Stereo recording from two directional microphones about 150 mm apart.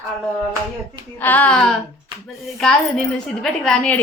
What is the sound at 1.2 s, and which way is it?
A woman's voice, 10° left (ahead or behind).